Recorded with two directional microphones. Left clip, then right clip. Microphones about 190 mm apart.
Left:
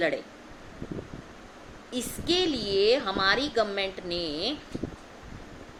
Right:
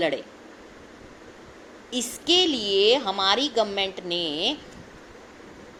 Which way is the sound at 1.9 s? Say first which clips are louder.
Right 6 dB; 15° right (ahead or behind).